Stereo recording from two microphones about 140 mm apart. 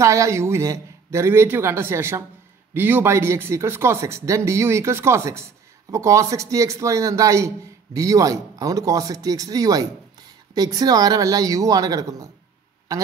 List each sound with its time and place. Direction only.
0.0 s a man's voice: 20° right (ahead or behind)